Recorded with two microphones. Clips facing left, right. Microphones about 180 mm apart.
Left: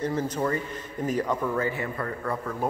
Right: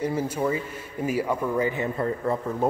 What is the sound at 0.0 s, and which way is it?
A man's voice, 10° right (ahead or behind).